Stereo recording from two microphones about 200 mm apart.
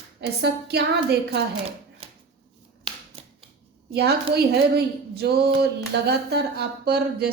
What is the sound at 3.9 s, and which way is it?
Speech, 55° right (ahead or behind).